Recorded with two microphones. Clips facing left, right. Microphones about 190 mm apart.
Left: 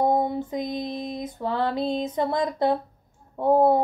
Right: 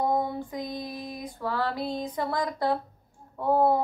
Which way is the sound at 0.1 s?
20° left (ahead or behind).